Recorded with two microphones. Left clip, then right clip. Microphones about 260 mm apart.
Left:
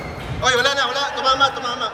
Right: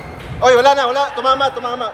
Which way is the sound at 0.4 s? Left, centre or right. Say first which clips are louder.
Right 7 dB; right.